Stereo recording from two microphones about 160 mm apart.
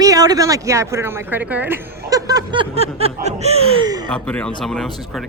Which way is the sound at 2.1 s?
25° right (ahead or behind).